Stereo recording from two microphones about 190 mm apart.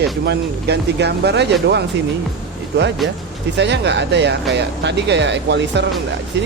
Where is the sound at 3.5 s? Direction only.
65° right (ahead or behind).